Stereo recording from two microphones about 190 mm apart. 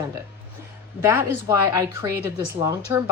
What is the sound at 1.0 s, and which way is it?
A woman's voice, 15° right (ahead or behind).